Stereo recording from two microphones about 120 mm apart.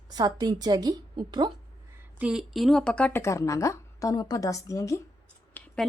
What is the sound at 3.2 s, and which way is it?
A woman's voice, 25° left (ahead or behind).